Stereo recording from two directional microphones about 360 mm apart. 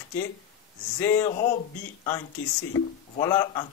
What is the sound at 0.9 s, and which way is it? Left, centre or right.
Speech, centre.